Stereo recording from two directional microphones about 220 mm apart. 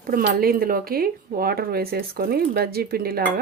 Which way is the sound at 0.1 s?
40° right (ahead or behind).